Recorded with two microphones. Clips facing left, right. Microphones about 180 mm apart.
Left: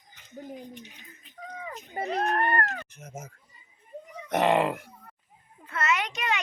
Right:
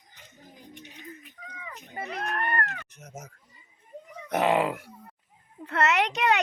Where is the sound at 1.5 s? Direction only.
40° left (ahead or behind).